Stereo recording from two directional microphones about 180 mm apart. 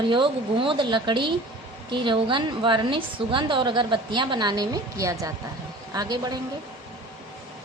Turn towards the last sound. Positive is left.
turn(degrees=-20)  # may be behind; listen again after turning